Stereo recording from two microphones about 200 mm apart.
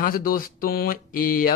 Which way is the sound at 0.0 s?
45° left (ahead or behind).